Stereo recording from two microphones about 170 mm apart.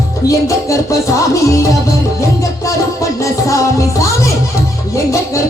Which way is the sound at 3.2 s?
20° left (ahead or behind).